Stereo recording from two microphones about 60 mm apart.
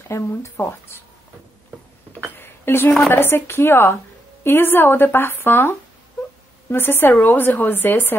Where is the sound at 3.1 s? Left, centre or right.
Left.